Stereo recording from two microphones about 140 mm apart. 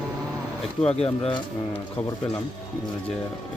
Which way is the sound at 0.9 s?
45° left (ahead or behind).